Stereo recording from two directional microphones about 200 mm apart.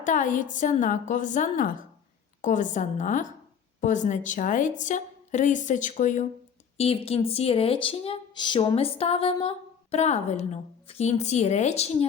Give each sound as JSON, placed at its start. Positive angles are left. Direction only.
{"t": 0.0, "sound": "a woman's voice", "side_deg": 40}